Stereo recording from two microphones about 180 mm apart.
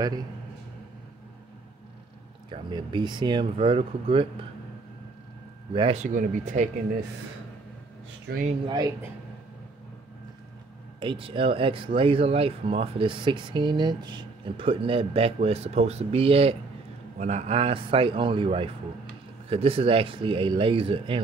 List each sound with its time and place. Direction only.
2.5 s speech: 25° right (ahead or behind)
5.7 s speech: 25° right (ahead or behind)
6.0 s speech: 45° right (ahead or behind)
8.3 s speech: 50° right (ahead or behind)
8.6 s speech: 20° right (ahead or behind)
11.0 s speech: 30° right (ahead or behind)